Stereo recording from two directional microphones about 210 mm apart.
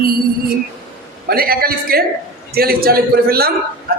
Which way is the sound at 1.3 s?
45° right (ahead or behind).